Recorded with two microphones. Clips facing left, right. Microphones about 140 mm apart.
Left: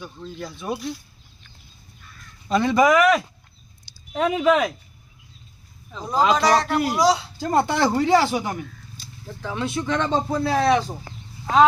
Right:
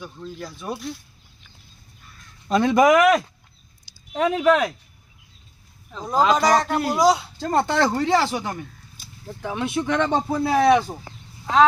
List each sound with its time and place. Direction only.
0.0 s speech: 5° right (ahead or behind)
2.5 s speech: centre (ahead or behind)
4.1 s speech: centre (ahead or behind)
5.9 s speech: centre (ahead or behind)
7.0 s speech: 50° right (ahead or behind)
7.3 s speech: 10° left (ahead or behind)
9.2 s speech: 20° right (ahead or behind)
10.8 s a sound: 10° right (ahead or behind)